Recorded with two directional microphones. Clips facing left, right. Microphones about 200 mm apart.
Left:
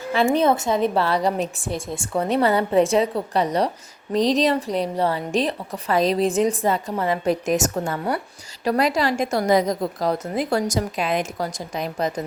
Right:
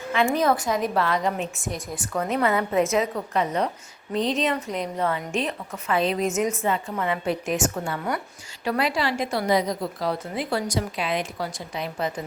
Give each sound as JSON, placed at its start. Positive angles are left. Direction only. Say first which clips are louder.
{"t": 0.1, "sound": "a woman's voice", "louder": "left 3 dB", "side_deg": 30}